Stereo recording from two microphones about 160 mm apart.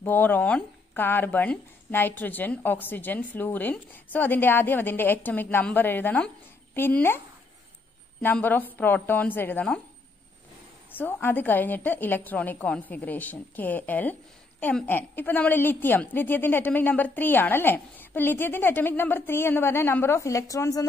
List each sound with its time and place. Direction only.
0.0 s speech: 10° left (ahead or behind)
8.2 s speech: 10° left (ahead or behind)
10.9 s speech: 10° left (ahead or behind)